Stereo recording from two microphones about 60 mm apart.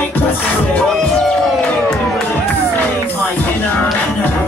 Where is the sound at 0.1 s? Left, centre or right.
Left.